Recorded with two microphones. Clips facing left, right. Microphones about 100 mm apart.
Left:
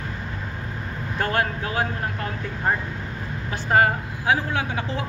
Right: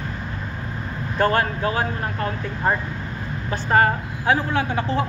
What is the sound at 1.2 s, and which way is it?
Speech, 50° right (ahead or behind).